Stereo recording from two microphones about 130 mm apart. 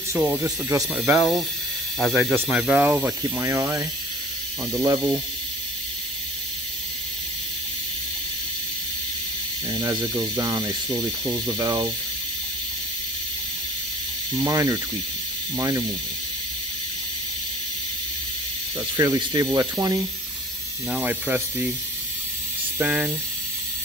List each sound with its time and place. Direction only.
0.2 s speech: 15° right (ahead or behind)
1.1 s speech: centre (ahead or behind)
2.5 s speech: 5° right (ahead or behind)
3.2 s speech: 20° right (ahead or behind)
9.7 s speech: 35° right (ahead or behind)
14.4 s speech: 30° right (ahead or behind)
18.9 s speech: 30° right (ahead or behind)
20.9 s speech: 10° right (ahead or behind)
22.8 s speech: 10° right (ahead or behind)